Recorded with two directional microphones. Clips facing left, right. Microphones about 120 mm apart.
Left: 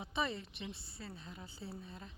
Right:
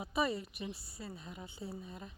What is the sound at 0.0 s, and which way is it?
A woman's voice, 5° right (ahead or behind).